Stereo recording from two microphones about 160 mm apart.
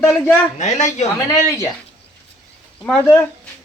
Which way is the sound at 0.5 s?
45° left (ahead or behind).